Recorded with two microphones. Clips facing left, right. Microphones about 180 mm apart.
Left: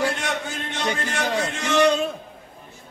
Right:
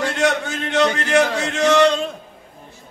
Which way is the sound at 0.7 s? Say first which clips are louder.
Right 10 dB; 75° right (ahead or behind).